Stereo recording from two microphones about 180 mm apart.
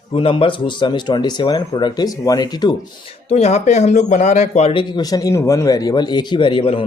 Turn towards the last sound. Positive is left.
turn(degrees=30)  # may be behind; listen again after turning